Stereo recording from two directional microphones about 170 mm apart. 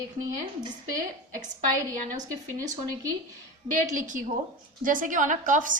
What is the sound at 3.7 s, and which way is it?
A woman's voice, 50° right (ahead or behind).